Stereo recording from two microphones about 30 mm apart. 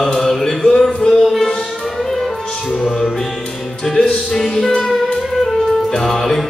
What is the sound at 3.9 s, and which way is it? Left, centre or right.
Music, left.